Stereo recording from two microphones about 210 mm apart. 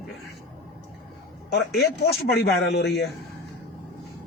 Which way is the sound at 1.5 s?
50° left (ahead or behind).